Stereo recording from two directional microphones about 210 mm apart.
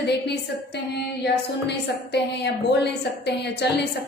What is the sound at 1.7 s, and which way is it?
A woman's voice, 55° left (ahead or behind).